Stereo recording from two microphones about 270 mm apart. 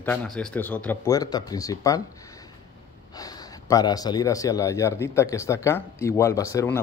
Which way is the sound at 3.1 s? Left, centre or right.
Centre.